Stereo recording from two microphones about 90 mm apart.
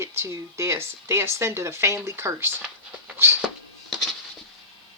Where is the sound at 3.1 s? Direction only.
25° right (ahead or behind).